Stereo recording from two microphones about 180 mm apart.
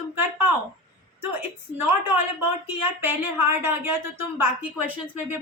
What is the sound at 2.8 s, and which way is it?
Speech, 10° right (ahead or behind).